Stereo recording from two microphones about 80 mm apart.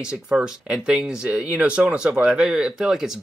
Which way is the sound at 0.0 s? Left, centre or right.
Centre.